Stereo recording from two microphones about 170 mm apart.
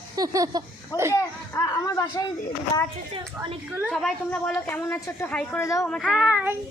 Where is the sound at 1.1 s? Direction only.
20° left (ahead or behind).